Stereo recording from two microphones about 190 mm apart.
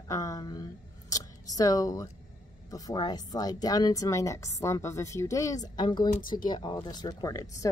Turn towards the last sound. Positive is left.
turn(degrees=20)  # may be behind; listen again after turning